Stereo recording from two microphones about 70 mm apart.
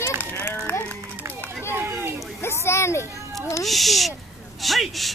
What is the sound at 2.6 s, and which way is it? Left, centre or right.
Speech, left.